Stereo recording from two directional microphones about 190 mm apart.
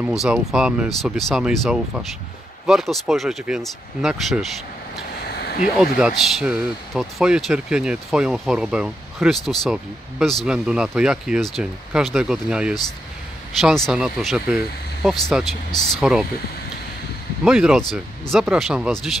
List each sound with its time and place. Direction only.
0.0 s speech: 5° right (ahead or behind)
5.2 s a sound: 55° left (ahead or behind)
5.9 s speech: 5° right (ahead or behind)
17.5 s speech: 5° right (ahead or behind)